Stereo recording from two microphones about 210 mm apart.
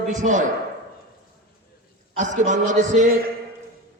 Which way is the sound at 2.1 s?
35° right (ahead or behind).